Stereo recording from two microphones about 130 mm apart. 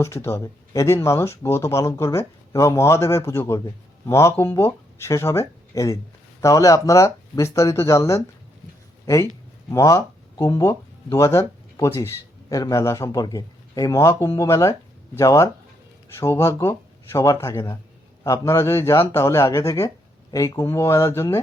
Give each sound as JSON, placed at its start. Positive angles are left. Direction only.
{"t": 0.0, "sound": "speech", "side_deg": 20}
{"t": 9.6, "sound": "speech", "side_deg": 25}